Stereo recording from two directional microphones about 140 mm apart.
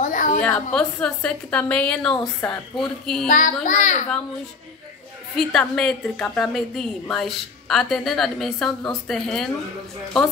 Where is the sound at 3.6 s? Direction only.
60° left (ahead or behind).